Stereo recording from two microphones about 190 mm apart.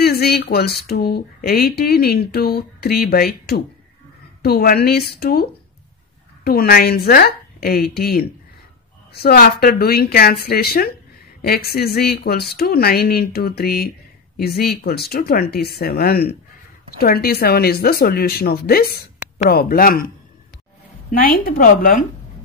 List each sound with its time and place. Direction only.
0.0 s speech: 55° left (ahead or behind)
21.1 s speech: 50° left (ahead or behind)